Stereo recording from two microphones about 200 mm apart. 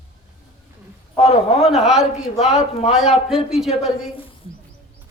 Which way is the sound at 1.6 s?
Centre (ahead or behind).